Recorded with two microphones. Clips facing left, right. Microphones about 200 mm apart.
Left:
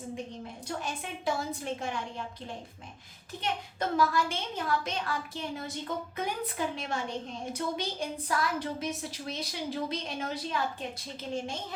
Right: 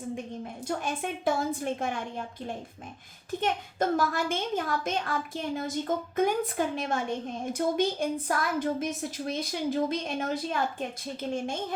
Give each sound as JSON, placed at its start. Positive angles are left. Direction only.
{"t": 0.8, "sound": "a woman's voice", "side_deg": -50}
{"t": 3.4, "sound": "a woman's voice", "side_deg": -50}